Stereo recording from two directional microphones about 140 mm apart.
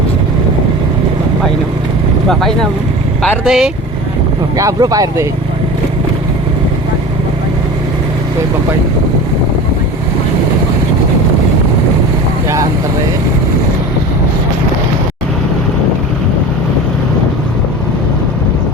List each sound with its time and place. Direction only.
2.3 s speech: 5° left (ahead or behind)
4.5 s speech: 25° right (ahead or behind)